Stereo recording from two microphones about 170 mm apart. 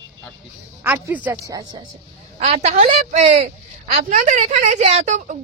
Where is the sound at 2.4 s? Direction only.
40° right (ahead or behind).